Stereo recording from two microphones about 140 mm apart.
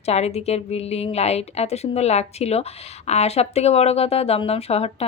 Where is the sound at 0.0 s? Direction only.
50° left (ahead or behind).